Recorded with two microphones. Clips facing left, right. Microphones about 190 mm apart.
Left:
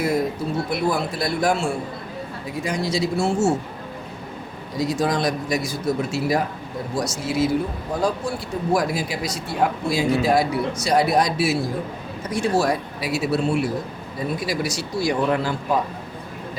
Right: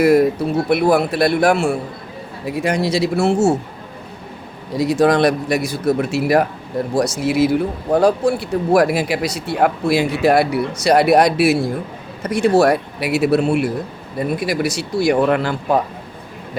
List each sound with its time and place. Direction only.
0.0 s speech: 70° right (ahead or behind)
4.8 s speech: 65° right (ahead or behind)